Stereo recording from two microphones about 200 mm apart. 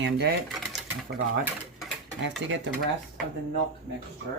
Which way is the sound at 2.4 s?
70° right (ahead or behind).